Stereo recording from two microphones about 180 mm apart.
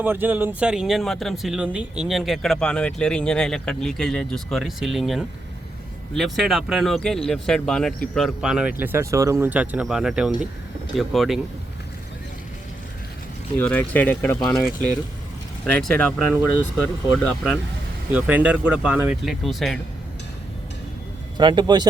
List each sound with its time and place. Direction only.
0.0 s speech: 10° right (ahead or behind)
13.6 s speech: 10° left (ahead or behind)
18.1 s speech: 10° right (ahead or behind)
21.3 s speech: 25° right (ahead or behind)